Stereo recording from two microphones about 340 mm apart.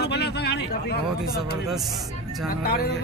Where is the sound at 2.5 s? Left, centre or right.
Left.